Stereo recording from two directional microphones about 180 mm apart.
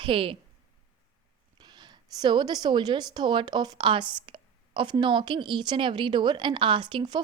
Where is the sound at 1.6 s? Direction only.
25° right (ahead or behind).